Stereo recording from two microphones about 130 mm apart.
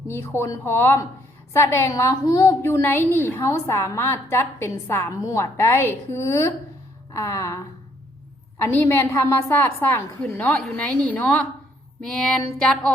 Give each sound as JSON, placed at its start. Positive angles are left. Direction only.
{"t": 0.1, "sound": "a woman's voice", "side_deg": 20}
{"t": 8.7, "sound": "a woman's voice", "side_deg": 20}
{"t": 12.0, "sound": "a sound", "side_deg": 0}